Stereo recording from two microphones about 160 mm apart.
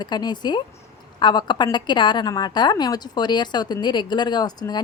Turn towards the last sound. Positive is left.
turn(degrees=25)  # may be behind; listen again after turning